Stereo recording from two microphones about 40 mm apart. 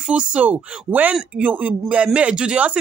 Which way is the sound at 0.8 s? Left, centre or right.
Right.